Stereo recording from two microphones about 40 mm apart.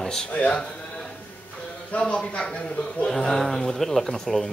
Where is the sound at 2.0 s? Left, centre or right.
Left.